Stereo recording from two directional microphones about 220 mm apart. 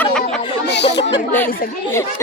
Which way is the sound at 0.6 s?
50° left (ahead or behind).